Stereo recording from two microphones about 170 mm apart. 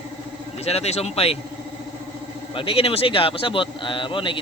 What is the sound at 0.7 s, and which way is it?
Speech, 40° left (ahead or behind).